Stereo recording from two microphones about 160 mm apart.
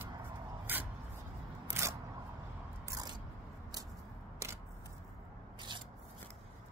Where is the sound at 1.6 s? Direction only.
15° right (ahead or behind).